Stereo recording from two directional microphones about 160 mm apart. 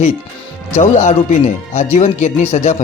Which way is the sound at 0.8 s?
50° left (ahead or behind).